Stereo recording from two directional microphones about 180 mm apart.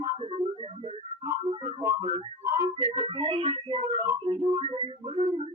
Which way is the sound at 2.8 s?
35° right (ahead or behind).